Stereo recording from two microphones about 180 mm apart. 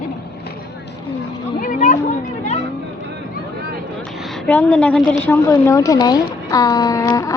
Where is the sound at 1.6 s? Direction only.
50° left (ahead or behind).